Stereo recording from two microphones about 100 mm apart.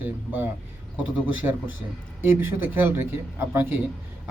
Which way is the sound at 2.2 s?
20° right (ahead or behind).